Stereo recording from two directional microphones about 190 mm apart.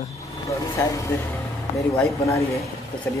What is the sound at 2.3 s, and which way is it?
Speech, 15° left (ahead or behind).